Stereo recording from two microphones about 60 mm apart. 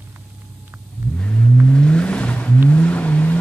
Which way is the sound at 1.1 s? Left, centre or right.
Centre.